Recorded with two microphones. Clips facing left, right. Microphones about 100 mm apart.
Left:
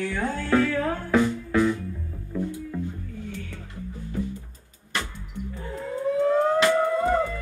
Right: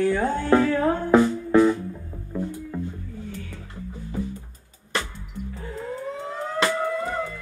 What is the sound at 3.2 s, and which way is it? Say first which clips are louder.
Music: left 1 dB; 5° right (ahead or behind).